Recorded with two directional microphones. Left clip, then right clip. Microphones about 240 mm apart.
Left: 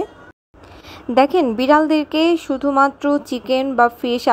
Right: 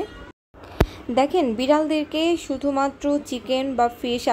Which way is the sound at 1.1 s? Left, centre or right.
Left.